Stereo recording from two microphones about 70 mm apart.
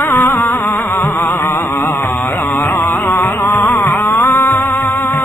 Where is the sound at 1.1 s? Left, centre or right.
Left.